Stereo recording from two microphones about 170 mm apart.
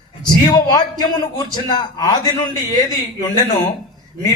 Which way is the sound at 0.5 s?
25° left (ahead or behind).